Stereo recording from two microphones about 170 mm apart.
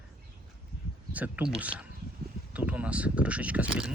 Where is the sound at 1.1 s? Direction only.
10° right (ahead or behind).